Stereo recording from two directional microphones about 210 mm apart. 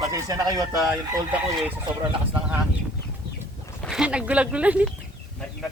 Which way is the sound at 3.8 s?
Centre (ahead or behind).